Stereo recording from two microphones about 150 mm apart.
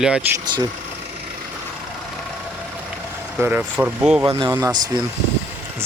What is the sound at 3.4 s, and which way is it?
Speech, 10° right (ahead or behind).